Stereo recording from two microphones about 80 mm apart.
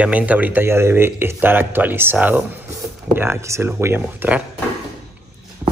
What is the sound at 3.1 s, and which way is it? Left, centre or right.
Speech, right.